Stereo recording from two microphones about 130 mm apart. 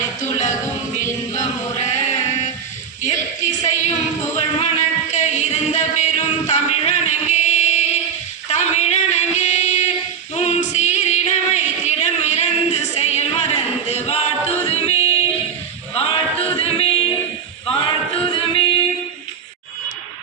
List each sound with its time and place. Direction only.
0.0 s music: 75° left (ahead or behind)
1.8 s chant: 70° left (ahead or behind)
3.0 s speech: 70° left (ahead or behind)
4.6 s music: 65° left (ahead or behind)
8.4 s a sound: 60° left (ahead or behind)
10.3 s singing: 60° left (ahead or behind)
16.0 s music: 50° left (ahead or behind)